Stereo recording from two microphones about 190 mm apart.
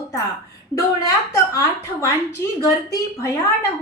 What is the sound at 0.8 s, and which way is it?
A woman's voice, 15° left (ahead or behind).